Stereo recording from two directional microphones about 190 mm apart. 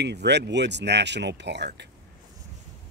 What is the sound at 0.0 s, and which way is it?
Speech, 60° right (ahead or behind).